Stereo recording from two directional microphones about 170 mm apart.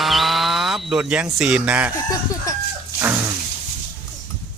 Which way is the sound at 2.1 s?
20° left (ahead or behind).